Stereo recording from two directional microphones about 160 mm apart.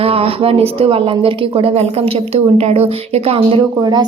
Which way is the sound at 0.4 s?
35° right (ahead or behind).